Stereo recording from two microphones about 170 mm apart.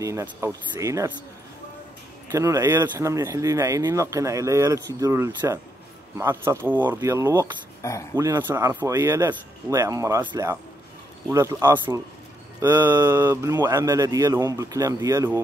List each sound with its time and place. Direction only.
0.0 s speech: 15° right (ahead or behind)
2.3 s speech: 15° right (ahead or behind)
7.8 s speech: 20° left (ahead or behind)
8.2 s speech: 15° right (ahead or behind)